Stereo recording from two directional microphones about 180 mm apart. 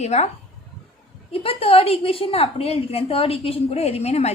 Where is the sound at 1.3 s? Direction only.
30° left (ahead or behind).